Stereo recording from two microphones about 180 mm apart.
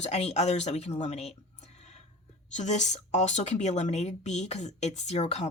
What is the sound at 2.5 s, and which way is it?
Speech, 40° left (ahead or behind).